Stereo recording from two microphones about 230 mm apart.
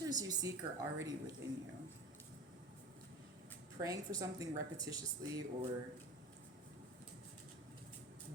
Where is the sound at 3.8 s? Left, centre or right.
Centre.